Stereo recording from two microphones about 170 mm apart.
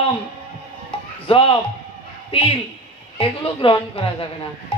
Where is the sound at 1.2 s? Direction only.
30° left (ahead or behind).